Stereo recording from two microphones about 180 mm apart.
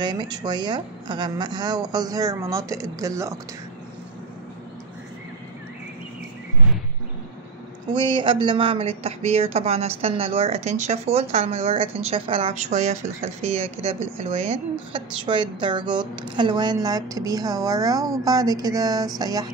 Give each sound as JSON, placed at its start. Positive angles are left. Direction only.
{"t": 0.0, "sound": "speech", "side_deg": -25}
{"t": 7.9, "sound": "speech", "side_deg": -25}